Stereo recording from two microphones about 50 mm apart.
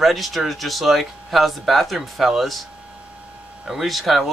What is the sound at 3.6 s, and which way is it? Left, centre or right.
Speech, centre.